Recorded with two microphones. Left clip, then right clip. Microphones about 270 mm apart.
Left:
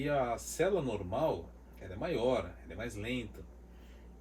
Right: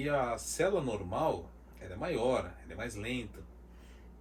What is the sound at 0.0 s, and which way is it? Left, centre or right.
Speech, right.